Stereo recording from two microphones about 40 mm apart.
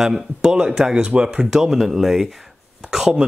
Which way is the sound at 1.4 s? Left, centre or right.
Centre.